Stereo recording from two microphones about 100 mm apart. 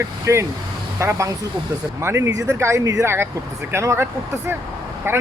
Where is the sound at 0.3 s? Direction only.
30° right (ahead or behind).